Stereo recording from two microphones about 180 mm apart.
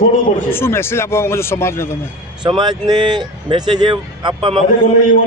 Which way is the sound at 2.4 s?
25° right (ahead or behind).